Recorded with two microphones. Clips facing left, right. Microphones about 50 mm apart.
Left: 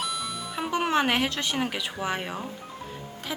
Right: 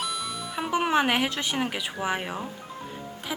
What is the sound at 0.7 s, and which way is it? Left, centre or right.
Speech, centre.